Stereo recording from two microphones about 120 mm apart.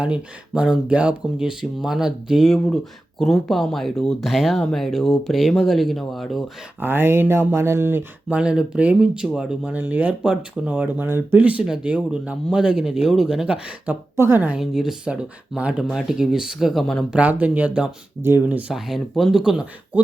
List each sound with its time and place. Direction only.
0.0 s speech: 10° right (ahead or behind)
6.7 s speech: 15° right (ahead or behind)
14.2 s speech: 20° right (ahead or behind)
14.6 s speech: 5° right (ahead or behind)
17.2 s speech: 10° right (ahead or behind)
18.7 s speech: centre (ahead or behind)